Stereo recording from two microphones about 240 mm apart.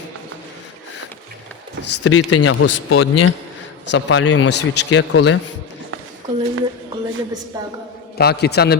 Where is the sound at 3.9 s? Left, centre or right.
Left.